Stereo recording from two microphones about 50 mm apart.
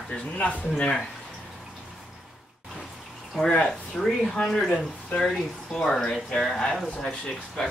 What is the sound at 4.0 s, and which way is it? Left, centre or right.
Speech, centre.